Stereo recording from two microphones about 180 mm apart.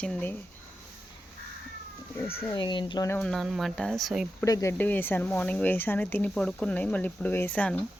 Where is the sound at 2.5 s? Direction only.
25° left (ahead or behind).